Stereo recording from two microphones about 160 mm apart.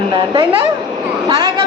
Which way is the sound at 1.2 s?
25° right (ahead or behind).